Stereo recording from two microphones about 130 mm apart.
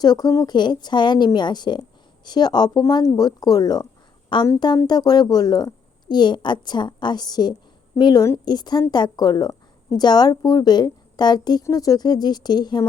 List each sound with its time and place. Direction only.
0.0 s a woman's voice: 30° left (ahead or behind)